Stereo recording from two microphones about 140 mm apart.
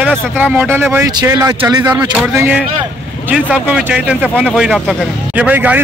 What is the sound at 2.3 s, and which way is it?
A man's voice, 15° right (ahead or behind).